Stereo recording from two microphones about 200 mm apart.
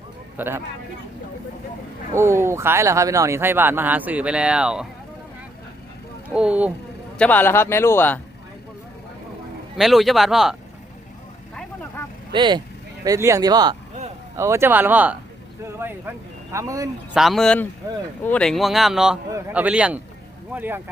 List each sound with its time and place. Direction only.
0.3 s speech: 10° right (ahead or behind)
2.1 s speech: 15° right (ahead or behind)
6.2 s speech: 5° right (ahead or behind)
7.2 s speech: 10° left (ahead or behind)
9.7 s speech: centre (ahead or behind)
12.3 s speech: 25° right (ahead or behind)
17.2 s speech: centre (ahead or behind)